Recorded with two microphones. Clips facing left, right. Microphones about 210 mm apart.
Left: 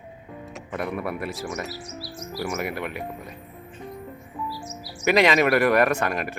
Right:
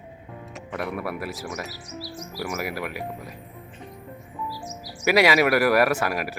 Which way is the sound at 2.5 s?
5° right (ahead or behind).